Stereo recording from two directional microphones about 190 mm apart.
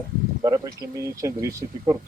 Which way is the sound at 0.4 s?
20° right (ahead or behind).